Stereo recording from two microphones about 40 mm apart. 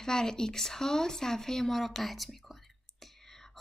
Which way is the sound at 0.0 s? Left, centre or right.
Centre.